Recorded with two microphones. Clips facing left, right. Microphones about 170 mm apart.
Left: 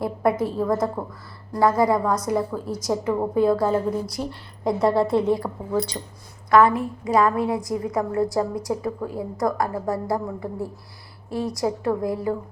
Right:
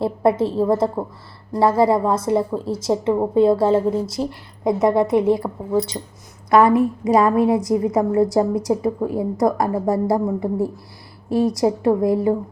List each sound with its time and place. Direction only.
0.0 s a woman's voice: 30° right (ahead or behind)